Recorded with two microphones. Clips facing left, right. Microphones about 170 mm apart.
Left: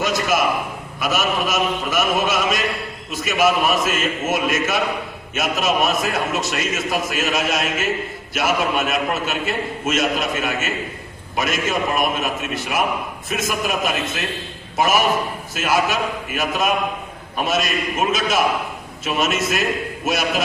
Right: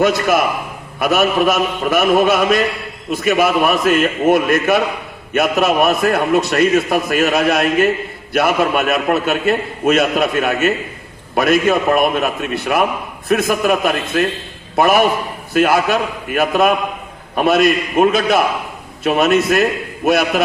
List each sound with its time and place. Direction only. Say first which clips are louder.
0.0 s a man's voice: right 5 dB; 60° right (ahead or behind)